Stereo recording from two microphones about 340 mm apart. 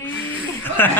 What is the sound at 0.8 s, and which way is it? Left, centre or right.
Mantra, centre.